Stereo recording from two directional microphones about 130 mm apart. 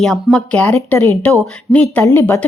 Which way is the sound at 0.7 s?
20° left (ahead or behind).